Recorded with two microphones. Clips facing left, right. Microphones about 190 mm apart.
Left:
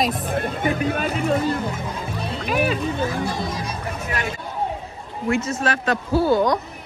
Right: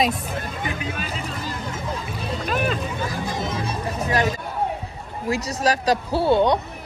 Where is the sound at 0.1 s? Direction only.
55° left (ahead or behind).